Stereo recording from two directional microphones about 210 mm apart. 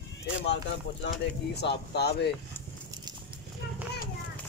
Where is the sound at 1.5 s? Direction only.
50° left (ahead or behind).